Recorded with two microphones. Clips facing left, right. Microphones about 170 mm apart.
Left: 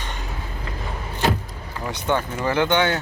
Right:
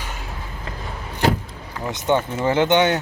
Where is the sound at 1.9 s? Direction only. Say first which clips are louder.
Right 3 dB; 20° right (ahead or behind).